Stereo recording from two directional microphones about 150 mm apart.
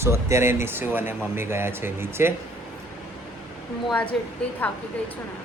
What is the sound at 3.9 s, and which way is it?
Speech, 10° left (ahead or behind).